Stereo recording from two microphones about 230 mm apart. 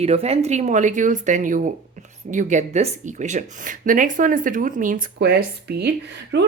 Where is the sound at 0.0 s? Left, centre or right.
Right.